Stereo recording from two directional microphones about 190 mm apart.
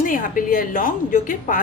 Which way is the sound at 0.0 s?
45° left (ahead or behind).